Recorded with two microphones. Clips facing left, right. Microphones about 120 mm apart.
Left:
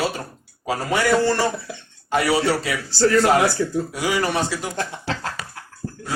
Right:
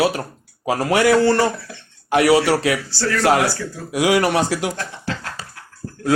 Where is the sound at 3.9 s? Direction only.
75° right (ahead or behind).